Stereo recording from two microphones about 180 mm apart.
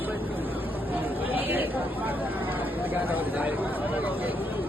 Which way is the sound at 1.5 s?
10° right (ahead or behind).